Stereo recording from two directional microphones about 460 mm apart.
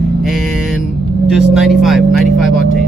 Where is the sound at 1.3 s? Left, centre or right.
Centre.